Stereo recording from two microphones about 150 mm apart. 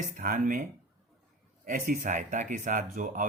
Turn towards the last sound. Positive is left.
turn(degrees=-60)  # may be behind; listen again after turning